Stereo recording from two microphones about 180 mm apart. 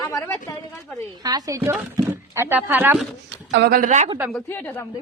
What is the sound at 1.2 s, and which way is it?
Speech, 20° right (ahead or behind).